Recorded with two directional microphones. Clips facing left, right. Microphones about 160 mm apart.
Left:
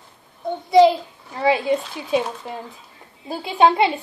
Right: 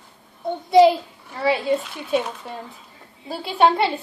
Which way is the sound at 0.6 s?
Centre (ahead or behind).